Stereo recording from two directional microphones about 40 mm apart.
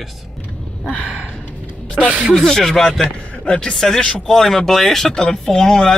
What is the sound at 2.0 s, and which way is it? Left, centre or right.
Speech, centre.